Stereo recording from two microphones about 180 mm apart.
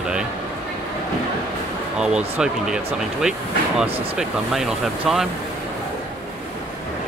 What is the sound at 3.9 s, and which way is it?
Speech, 30° right (ahead or behind).